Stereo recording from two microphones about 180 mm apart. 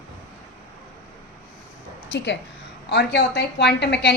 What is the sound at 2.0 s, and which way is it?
A woman's voice, 75° left (ahead or behind).